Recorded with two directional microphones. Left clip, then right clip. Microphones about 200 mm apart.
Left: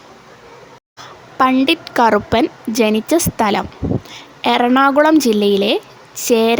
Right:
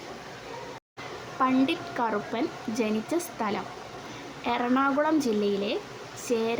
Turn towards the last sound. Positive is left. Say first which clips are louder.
# left 14 dB
turn(degrees=55)  # may be behind; listen again after turning